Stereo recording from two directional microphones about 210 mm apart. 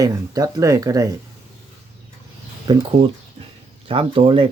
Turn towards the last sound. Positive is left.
turn(degrees=-25)  # may be behind; listen again after turning